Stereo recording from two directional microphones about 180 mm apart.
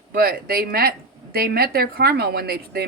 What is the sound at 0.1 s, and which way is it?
Speech, 60° right (ahead or behind).